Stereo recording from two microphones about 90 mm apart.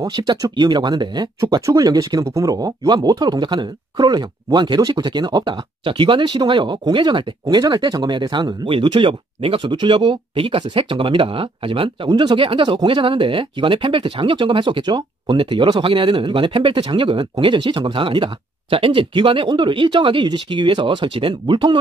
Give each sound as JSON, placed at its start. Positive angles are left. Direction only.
{"t": 0.0, "sound": "speech", "side_deg": -50}
{"t": 1.4, "sound": "speech", "side_deg": -40}
{"t": 12.1, "sound": "speech", "side_deg": -60}